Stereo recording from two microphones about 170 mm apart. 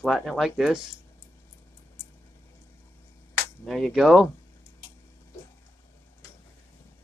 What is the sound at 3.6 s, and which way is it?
Speech, centre (ahead or behind).